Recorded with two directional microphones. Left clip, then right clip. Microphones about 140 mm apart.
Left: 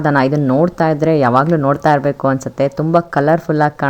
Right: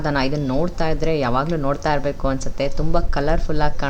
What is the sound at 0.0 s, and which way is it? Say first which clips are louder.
A woman's voice: left 8 dB; 20° left (ahead or behind).